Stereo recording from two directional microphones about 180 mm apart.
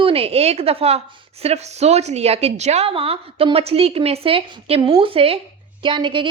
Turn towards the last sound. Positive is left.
turn(degrees=-25)  # may be behind; listen again after turning